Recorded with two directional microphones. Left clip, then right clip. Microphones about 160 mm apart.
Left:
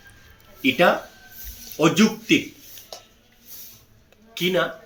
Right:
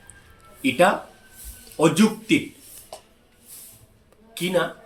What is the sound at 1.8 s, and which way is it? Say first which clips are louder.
Speech: even; 20° right (ahead or behind).